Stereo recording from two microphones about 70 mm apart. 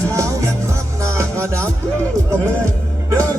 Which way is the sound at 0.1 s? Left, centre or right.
Right.